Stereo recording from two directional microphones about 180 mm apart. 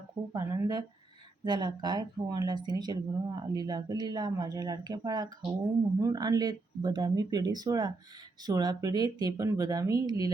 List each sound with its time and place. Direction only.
0.3 s speech: 20° right (ahead or behind)